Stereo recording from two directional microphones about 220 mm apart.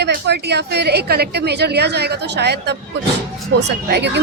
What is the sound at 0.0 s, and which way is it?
A woman's voice, 50° right (ahead or behind).